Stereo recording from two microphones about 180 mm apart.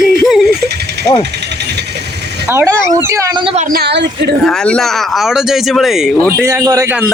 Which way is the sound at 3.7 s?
60° right (ahead or behind).